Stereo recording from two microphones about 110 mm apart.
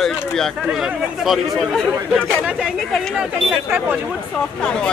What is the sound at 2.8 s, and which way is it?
Speech, 5° left (ahead or behind).